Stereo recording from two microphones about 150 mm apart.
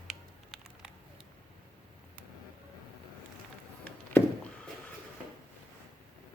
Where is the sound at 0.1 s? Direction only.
5° right (ahead or behind).